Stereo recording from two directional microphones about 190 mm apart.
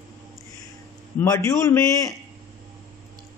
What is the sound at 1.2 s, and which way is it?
Speech, 15° left (ahead or behind).